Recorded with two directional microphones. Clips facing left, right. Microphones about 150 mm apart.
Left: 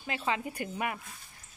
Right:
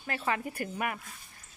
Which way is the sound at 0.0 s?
15° left (ahead or behind).